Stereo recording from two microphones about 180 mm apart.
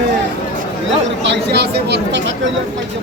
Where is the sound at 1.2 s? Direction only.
70° right (ahead or behind).